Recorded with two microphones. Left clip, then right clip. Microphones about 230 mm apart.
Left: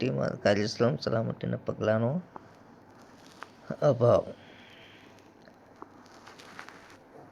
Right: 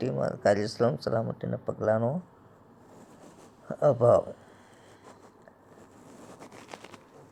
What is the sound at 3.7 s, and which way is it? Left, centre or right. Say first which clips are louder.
Speech: right 2 dB; centre.